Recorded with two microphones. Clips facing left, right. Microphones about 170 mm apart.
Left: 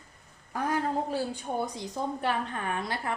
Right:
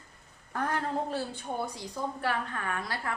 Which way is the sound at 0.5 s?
10° left (ahead or behind).